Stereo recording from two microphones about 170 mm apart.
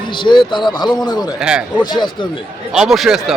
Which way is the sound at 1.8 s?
25° left (ahead or behind).